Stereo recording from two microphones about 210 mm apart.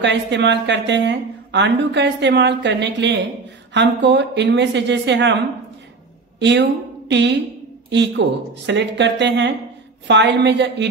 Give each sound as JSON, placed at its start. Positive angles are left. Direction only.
{"t": 0.0, "sound": "a woman's voice", "side_deg": -55}
{"t": 6.4, "sound": "a woman's voice", "side_deg": -55}